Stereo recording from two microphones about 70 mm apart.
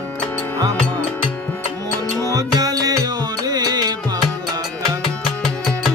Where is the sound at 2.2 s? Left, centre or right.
Right.